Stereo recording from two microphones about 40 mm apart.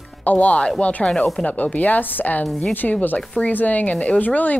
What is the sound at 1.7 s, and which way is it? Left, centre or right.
A woman's voice, left.